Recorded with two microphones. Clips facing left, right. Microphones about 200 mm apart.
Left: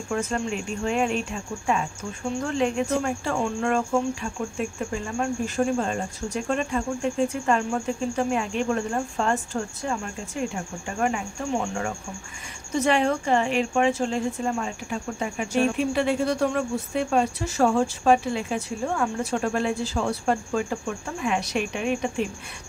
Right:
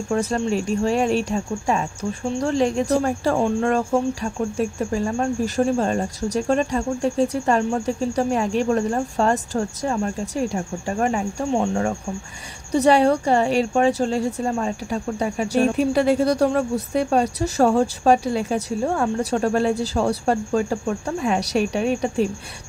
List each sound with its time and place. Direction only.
0.1 s a woman's voice: 35° right (ahead or behind)